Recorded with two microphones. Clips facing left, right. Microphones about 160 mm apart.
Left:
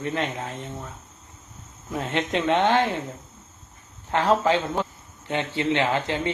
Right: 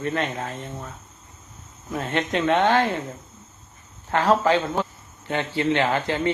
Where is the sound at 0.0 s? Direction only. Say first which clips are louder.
Right 2 dB; 20° left (ahead or behind).